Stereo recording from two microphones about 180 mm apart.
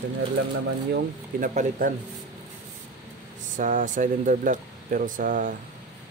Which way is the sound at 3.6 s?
45° right (ahead or behind).